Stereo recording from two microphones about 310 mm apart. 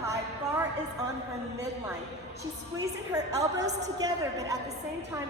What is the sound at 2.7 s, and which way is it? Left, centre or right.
A woman's voice, centre.